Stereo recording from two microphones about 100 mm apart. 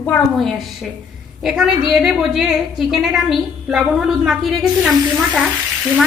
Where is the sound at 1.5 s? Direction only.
5° right (ahead or behind).